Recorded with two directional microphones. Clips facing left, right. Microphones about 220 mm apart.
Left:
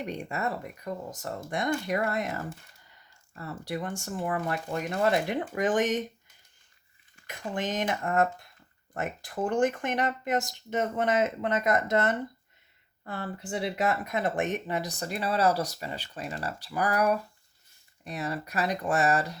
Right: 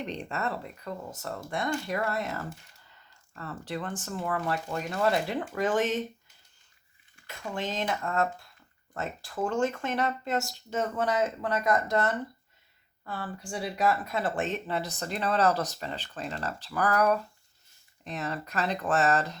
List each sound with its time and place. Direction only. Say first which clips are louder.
0.0 s speech: left 1 dB; 10° left (ahead or behind)
7.3 s speech: left 2 dB; 15° left (ahead or behind)